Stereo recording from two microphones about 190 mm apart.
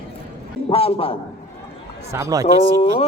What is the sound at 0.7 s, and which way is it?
Speech, 30° left (ahead or behind).